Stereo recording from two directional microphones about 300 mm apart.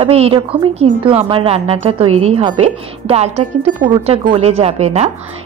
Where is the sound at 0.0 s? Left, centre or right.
Centre.